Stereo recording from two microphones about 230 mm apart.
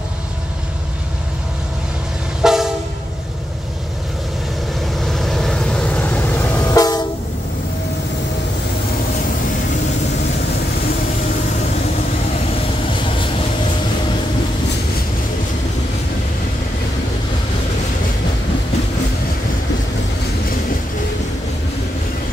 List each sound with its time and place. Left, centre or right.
2.4 s train: centre
5.1 s train: centre
13.0 s vehicle: left